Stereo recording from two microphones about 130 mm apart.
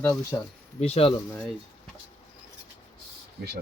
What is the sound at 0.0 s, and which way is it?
Speech, 20° left (ahead or behind).